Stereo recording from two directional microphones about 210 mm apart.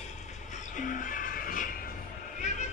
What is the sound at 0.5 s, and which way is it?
Train, 35° left (ahead or behind).